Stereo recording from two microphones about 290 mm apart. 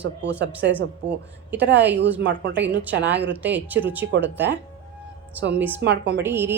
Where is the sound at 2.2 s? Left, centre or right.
Right.